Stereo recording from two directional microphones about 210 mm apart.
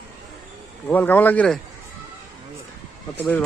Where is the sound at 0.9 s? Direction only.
10° left (ahead or behind).